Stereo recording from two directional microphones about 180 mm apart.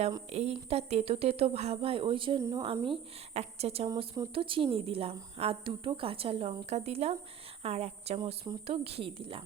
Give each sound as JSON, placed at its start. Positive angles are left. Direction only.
{"t": 0.3, "sound": "speech", "side_deg": -35}
{"t": 2.6, "sound": "speech", "side_deg": -30}
{"t": 3.8, "sound": "speech", "side_deg": -20}